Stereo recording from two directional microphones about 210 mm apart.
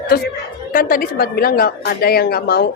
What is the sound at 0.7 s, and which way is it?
A woman's voice, 40° left (ahead or behind).